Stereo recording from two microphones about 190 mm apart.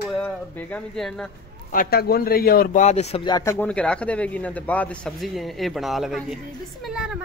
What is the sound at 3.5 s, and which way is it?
A man's voice, 5° left (ahead or behind).